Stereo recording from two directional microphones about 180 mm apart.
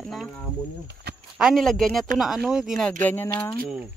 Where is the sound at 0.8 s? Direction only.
65° right (ahead or behind).